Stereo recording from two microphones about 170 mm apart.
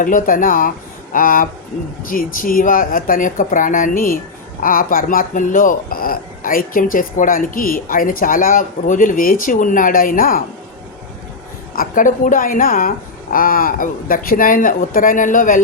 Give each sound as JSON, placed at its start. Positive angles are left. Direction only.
{"t": 0.0, "sound": "speech", "side_deg": 50}
{"t": 11.7, "sound": "speech", "side_deg": 55}